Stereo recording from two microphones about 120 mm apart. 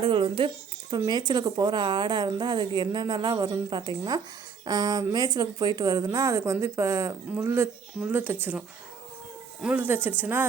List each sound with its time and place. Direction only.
0.0 s speech: 45° right (ahead or behind); by 10.4 s 15° right (ahead or behind)